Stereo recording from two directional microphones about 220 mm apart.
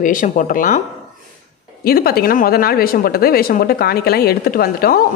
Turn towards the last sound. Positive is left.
turn(degrees=40)  # may be behind; listen again after turning